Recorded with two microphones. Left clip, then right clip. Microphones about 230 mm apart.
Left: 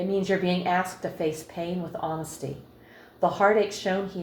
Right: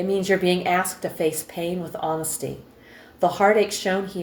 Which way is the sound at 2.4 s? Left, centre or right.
Right.